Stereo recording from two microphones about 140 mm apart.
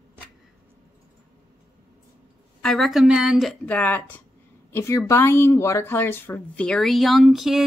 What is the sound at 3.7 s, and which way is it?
A woman's voice, 10° left (ahead or behind).